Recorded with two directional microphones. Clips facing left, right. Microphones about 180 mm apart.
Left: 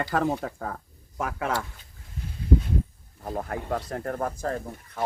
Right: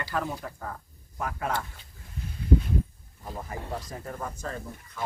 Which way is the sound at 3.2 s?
60° left (ahead or behind).